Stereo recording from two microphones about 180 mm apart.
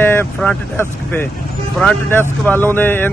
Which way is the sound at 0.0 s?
10° left (ahead or behind).